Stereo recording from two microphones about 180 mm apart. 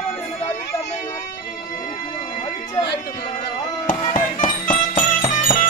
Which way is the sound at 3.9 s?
45° left (ahead or behind).